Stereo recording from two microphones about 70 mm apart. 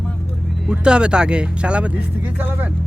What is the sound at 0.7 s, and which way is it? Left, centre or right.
Speech, centre.